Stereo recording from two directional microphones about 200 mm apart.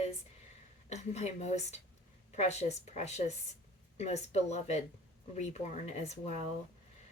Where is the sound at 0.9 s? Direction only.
35° left (ahead or behind).